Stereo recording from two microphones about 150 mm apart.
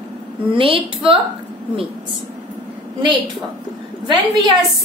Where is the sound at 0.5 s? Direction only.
35° right (ahead or behind).